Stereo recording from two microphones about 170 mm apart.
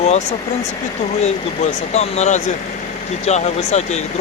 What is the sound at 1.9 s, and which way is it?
Speech, 40° left (ahead or behind).